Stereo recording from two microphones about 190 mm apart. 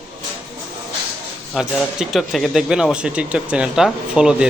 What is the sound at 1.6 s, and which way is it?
Speech, centre (ahead or behind).